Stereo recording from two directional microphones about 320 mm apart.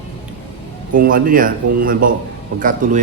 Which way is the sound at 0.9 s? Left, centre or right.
Right.